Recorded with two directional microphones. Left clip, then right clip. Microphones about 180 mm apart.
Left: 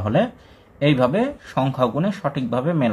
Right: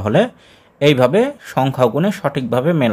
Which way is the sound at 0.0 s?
35° right (ahead or behind).